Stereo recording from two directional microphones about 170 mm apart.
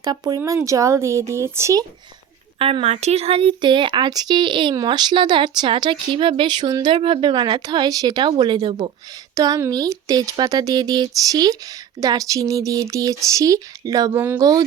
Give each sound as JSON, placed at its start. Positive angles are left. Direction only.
{"t": 0.0, "sound": "speech", "side_deg": -25}
{"t": 2.6, "sound": "speech", "side_deg": -35}